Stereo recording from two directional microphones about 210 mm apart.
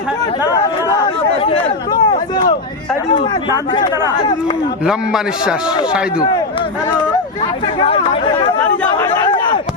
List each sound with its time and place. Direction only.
0.5 s chatter: 15° left (ahead or behind)
3.7 s speech: 20° left (ahead or behind)
4.9 s a man's voice: 5° right (ahead or behind)
7.8 s speech: 25° left (ahead or behind)
8.6 s speech: 10° left (ahead or behind)